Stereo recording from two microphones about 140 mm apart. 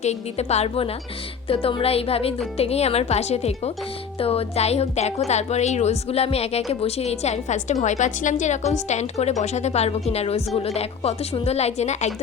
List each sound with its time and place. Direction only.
0.0 s a woman's voice: 50° left (ahead or behind)